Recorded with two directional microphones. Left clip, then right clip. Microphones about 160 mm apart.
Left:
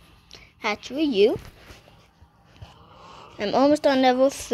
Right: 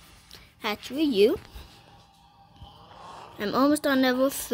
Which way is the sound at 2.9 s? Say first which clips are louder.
Right 1 dB; 35° right (ahead or behind).